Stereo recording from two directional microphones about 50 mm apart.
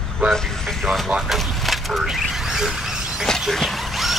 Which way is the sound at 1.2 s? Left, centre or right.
Centre.